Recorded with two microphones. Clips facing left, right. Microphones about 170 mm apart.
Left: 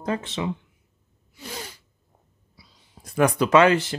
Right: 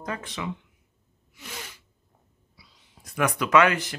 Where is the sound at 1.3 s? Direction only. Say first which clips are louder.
Left 5 dB; 35° left (ahead or behind).